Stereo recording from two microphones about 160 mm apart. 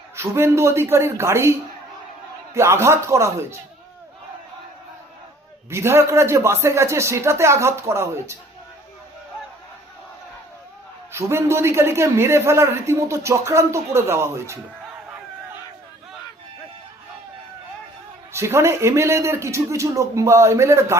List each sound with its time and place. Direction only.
0.2 s a man's voice: 15° right (ahead or behind)
5.7 s a man's voice: 15° right (ahead or behind)
11.1 s a man's voice: 15° right (ahead or behind)
18.3 s a man's voice: 15° right (ahead or behind)